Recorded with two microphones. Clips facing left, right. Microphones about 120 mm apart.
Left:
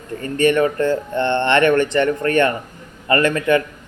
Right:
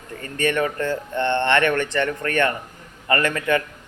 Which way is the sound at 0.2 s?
20° left (ahead or behind).